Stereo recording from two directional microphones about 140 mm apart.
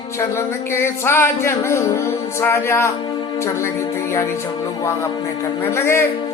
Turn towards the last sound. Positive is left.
turn(degrees=15)  # may be behind; listen again after turning